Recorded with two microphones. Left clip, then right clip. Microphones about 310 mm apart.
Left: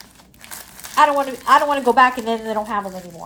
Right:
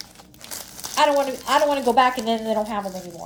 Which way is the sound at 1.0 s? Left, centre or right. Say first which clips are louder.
Left 2 dB; left.